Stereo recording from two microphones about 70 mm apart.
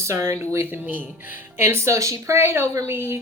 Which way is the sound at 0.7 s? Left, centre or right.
Right.